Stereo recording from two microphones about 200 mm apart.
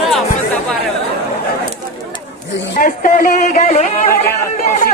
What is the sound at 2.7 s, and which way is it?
A man's voice, 40° left (ahead or behind).